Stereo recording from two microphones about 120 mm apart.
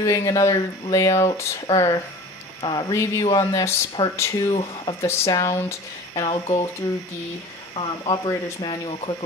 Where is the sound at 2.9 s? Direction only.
25° left (ahead or behind).